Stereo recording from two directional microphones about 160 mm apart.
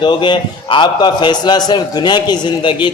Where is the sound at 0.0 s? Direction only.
30° left (ahead or behind).